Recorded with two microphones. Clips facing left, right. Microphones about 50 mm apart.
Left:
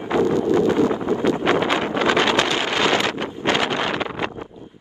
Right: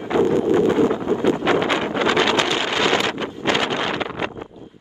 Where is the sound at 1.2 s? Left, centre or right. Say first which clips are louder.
Right 1 dB; left.